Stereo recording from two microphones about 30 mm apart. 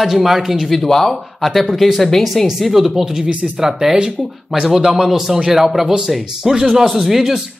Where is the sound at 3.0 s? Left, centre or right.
Centre.